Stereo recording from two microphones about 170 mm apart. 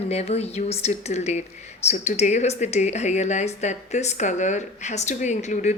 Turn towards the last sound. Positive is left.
turn(degrees=45)  # may be behind; listen again after turning